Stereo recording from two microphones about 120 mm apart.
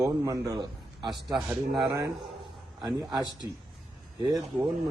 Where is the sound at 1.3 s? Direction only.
Centre (ahead or behind).